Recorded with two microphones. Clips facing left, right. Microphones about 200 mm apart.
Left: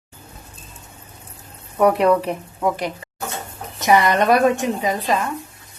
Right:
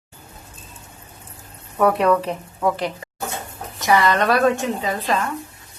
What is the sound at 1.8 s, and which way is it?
Speech, 15° left (ahead or behind).